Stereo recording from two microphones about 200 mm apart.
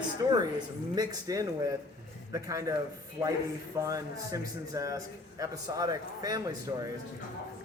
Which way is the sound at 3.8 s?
15° right (ahead or behind).